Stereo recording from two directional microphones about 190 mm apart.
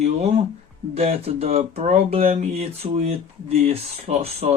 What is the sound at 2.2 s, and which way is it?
Speech, 45° right (ahead or behind).